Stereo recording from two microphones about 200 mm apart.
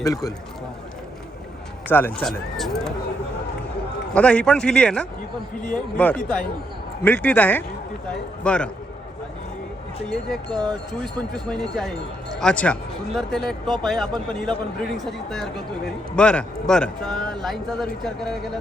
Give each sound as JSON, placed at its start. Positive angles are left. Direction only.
{"t": 0.0, "sound": "a man's voice", "side_deg": 15}
{"t": 1.9, "sound": "speech", "side_deg": 10}
{"t": 4.1, "sound": "a man's voice", "side_deg": 5}
{"t": 10.1, "sound": "speech", "side_deg": 0}